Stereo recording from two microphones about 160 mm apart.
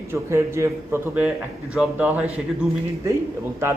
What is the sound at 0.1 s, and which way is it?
A man's voice, 15° right (ahead or behind).